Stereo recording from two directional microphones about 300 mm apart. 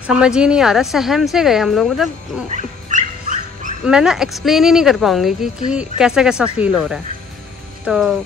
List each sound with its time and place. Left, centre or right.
0.0 s speech: centre
2.5 s dog: right
3.8 s speech: centre